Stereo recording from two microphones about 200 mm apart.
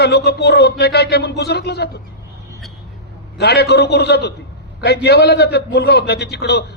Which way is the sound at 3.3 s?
55° left (ahead or behind).